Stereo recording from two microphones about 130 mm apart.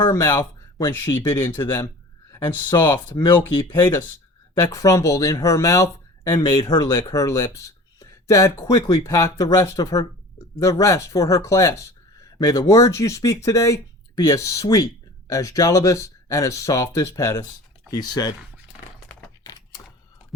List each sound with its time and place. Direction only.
0.0 s speech: 20° left (ahead or behind)
3.7 s speech: 20° left (ahead or behind)